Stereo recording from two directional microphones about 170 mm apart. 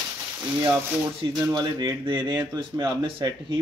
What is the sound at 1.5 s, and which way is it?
Speech, 20° right (ahead or behind).